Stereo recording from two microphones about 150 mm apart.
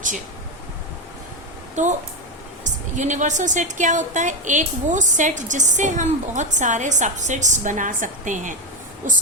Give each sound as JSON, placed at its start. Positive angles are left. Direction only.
{"t": 1.7, "sound": "a woman's voice", "side_deg": -55}